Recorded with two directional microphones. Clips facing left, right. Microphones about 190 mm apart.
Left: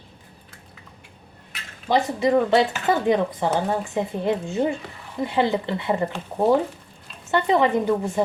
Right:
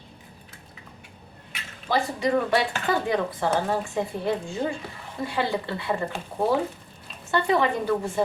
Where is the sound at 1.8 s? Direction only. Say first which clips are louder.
Left 4 dB; 20° left (ahead or behind).